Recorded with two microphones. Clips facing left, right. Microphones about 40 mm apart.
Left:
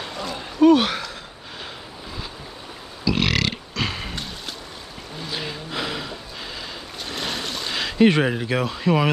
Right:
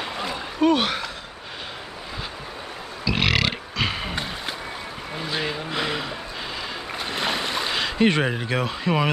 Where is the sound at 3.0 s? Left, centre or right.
Centre.